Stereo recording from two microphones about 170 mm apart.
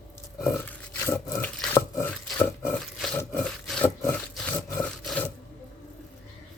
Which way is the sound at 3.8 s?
10° left (ahead or behind).